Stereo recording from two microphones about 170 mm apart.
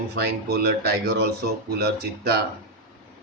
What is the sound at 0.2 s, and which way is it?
Speech, 70° right (ahead or behind).